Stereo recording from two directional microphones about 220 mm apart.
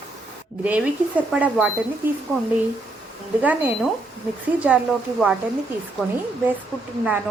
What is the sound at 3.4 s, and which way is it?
Speech, 5° right (ahead or behind).